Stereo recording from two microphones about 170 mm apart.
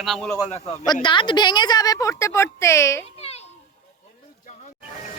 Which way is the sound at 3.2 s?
40° left (ahead or behind).